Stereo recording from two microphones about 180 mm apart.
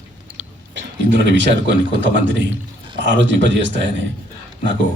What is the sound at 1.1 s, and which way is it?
A man's voice, 80° right.